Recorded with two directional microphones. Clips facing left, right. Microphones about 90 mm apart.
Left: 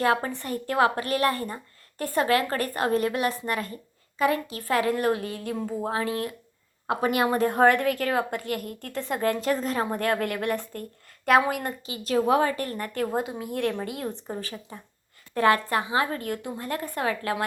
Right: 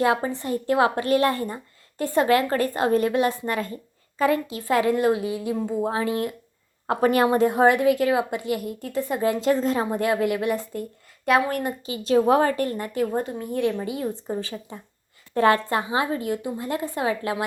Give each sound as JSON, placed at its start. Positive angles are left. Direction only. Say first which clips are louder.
{"t": 0.0, "sound": "a woman's voice", "louder": "right 2 dB", "side_deg": -20}
{"t": 6.8, "sound": "a woman's voice", "louder": "right 4 dB", "side_deg": -35}
{"t": 7.3, "sound": "a woman's voice", "louder": "left 1 dB", "side_deg": -15}
{"t": 9.3, "sound": "a woman's voice", "louder": "right 4 dB", "side_deg": -25}
{"t": 9.8, "sound": "a woman's voice", "louder": "right 3 dB", "side_deg": -10}
{"t": 11.3, "sound": "speech", "louder": "even", "side_deg": 5}
{"t": 11.9, "sound": "a woman's voice", "louder": "right 4 dB", "side_deg": -30}
{"t": 12.4, "sound": "a woman's voice", "louder": "right 3 dB", "side_deg": -40}
{"t": 12.6, "sound": "a woman's voice", "louder": "right 4 dB", "side_deg": -20}
{"t": 13.1, "sound": "speech", "louder": "right 2 dB", "side_deg": 5}
{"t": 15.4, "sound": "a woman's voice", "louder": "right 2 dB", "side_deg": -25}
{"t": 16.1, "sound": "a woman's voice", "louder": "right 4 dB", "side_deg": -15}